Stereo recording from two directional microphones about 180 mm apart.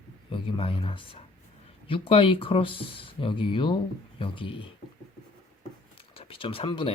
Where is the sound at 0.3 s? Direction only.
30° left (ahead or behind).